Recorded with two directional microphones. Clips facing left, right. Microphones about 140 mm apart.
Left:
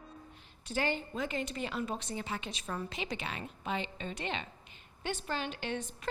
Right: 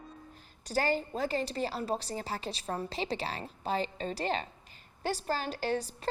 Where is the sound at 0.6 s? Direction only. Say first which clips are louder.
Right 4 dB; 40° right (ahead or behind).